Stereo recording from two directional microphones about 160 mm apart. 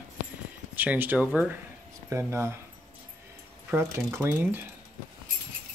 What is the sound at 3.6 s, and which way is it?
Speech, 15° right (ahead or behind).